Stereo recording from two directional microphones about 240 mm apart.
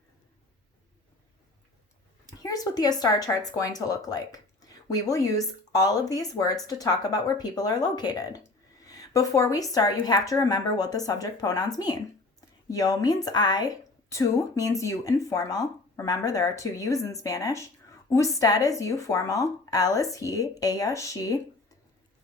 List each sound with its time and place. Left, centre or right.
2.2 s speech: centre
8.8 s a sound: centre
9.7 s speech: centre